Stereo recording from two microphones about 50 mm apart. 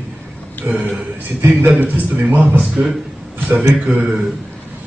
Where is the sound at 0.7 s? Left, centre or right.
Right.